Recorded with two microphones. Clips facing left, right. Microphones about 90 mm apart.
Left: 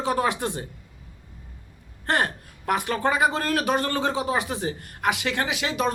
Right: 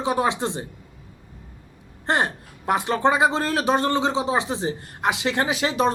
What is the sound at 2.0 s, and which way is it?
A man's voice, 20° right (ahead or behind).